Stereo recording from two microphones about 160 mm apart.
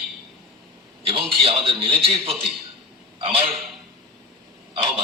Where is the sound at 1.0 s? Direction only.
35° right (ahead or behind).